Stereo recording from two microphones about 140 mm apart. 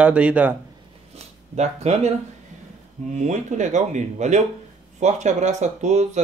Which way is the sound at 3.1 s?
60° right (ahead or behind).